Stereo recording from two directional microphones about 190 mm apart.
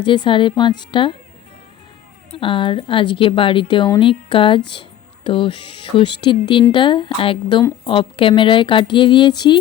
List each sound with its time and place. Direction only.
0.0 s a woman's voice: 25° left (ahead or behind)
2.3 s a woman's voice: 25° left (ahead or behind)